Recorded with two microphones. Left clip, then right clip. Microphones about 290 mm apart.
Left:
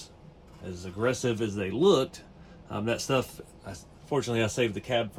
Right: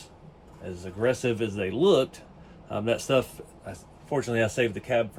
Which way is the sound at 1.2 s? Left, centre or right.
Left.